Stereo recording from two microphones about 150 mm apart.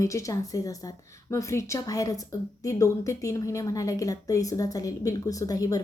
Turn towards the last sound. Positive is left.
turn(degrees=25)  # may be behind; listen again after turning